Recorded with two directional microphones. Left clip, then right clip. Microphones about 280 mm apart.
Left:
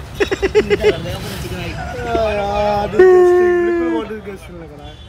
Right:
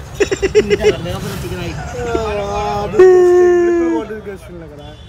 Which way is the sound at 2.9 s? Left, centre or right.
Centre.